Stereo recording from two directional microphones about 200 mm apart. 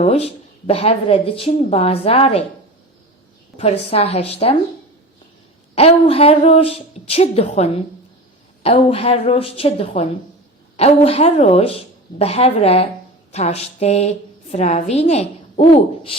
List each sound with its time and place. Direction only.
0.0 s a woman's voice: 30° left (ahead or behind)
3.6 s a woman's voice: 30° left (ahead or behind)
5.7 s a woman's voice: 30° left (ahead or behind)